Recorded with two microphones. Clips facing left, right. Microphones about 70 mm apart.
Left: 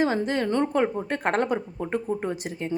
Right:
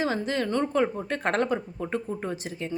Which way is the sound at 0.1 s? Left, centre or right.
Left.